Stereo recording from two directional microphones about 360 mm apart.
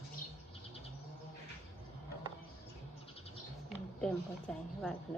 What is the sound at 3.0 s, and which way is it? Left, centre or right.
Bird, centre.